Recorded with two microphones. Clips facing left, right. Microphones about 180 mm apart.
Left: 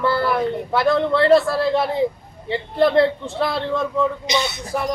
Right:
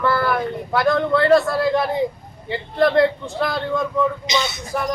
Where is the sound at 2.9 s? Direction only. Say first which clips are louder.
Even; 30° left (ahead or behind).